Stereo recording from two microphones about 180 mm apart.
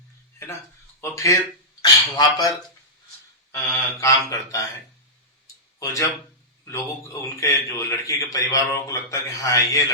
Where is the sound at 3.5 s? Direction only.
15° left (ahead or behind).